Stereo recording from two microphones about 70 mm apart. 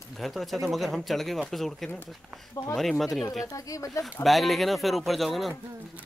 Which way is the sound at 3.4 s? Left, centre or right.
Left.